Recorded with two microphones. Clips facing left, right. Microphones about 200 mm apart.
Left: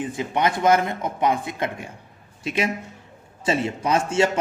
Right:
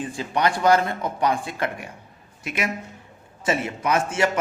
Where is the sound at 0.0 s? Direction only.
20° left (ahead or behind).